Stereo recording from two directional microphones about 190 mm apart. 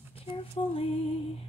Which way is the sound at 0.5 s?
30° left (ahead or behind).